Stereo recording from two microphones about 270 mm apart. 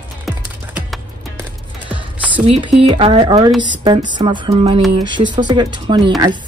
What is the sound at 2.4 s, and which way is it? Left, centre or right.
Speech, right.